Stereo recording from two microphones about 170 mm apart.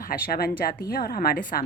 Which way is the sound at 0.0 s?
65° left (ahead or behind).